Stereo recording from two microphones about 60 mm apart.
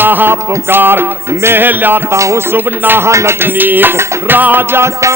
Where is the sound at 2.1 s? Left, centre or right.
Right.